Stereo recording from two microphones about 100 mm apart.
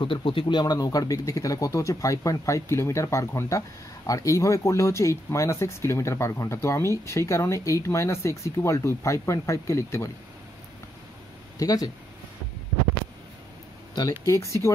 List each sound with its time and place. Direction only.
0.0 s speech: 60° left (ahead or behind); by 10.1 s 25° left (ahead or behind)
11.5 s speech: 40° left (ahead or behind)
14.2 s speech: 30° left (ahead or behind)